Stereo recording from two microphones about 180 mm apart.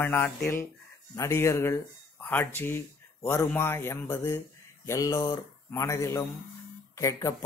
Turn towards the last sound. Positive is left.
turn(degrees=15)  # may be behind; listen again after turning